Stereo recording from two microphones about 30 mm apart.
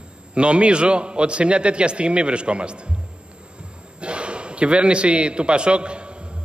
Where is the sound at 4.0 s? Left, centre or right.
Right.